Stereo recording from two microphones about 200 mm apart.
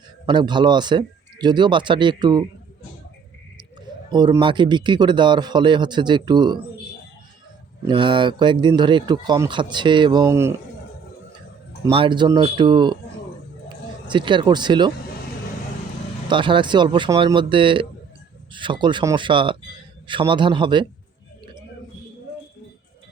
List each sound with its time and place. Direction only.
0.3 s a man's voice: 20° right (ahead or behind)
4.1 s a man's voice: 20° right (ahead or behind)
7.9 s a man's voice: 25° right (ahead or behind)
11.9 s a man's voice: 25° right (ahead or behind)
14.1 s a man's voice: 25° right (ahead or behind)
16.3 s a man's voice: 25° right (ahead or behind)